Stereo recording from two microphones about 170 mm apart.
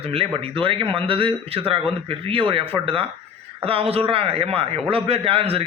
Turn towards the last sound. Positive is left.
turn(degrees=-35)  # may be behind; listen again after turning